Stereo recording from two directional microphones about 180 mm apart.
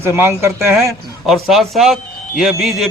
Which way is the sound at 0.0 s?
15° right (ahead or behind).